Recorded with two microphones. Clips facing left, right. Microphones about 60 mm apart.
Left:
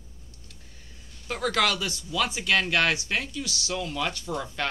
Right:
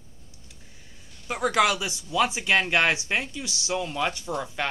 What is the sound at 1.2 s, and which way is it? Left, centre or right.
Speech, centre.